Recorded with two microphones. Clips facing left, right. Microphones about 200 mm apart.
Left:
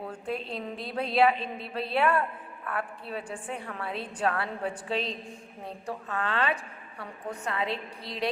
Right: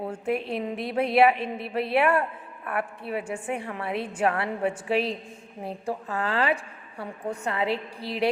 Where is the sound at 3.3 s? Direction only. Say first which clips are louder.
Right 6 dB; 25° right (ahead or behind).